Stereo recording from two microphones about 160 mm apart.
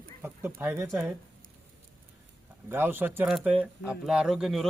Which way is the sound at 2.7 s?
15° right (ahead or behind).